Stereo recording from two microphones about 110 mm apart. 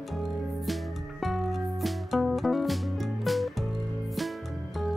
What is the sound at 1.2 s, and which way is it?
Music, centre (ahead or behind).